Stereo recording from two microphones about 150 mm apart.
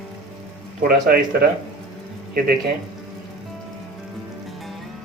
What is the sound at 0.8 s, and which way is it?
Speech, 75° right (ahead or behind).